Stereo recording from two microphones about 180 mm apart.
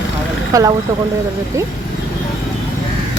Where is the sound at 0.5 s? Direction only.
20° right (ahead or behind).